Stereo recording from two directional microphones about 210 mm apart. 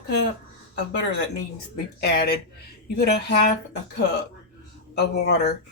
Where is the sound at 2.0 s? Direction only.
50° left (ahead or behind).